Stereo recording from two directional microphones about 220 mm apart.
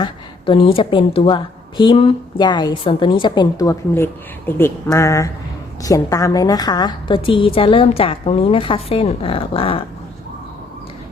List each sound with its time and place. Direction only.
0.0 s a woman's voice: 25° left (ahead or behind)